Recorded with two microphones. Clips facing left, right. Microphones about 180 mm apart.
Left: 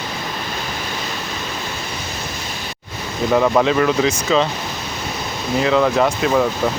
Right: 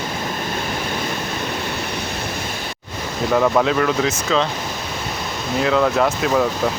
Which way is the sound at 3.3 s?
5° left (ahead or behind).